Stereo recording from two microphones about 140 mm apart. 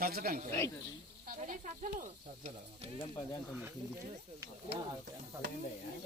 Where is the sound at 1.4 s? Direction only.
55° right (ahead or behind).